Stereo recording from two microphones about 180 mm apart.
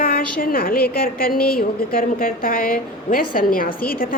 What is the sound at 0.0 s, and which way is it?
A woman's voice, 55° left (ahead or behind).